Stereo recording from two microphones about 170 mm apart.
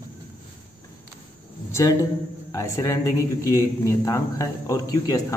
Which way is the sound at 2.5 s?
20° left (ahead or behind).